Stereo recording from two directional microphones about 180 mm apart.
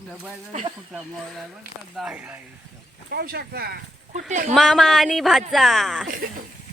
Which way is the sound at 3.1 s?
60° right (ahead or behind).